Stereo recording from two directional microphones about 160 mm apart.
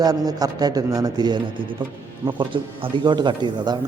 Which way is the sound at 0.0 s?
25° right (ahead or behind).